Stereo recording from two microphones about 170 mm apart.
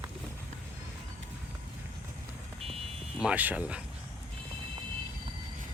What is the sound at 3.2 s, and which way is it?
Speech, 5° right (ahead or behind).